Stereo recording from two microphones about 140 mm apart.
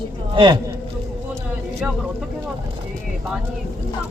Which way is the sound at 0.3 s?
35° right (ahead or behind).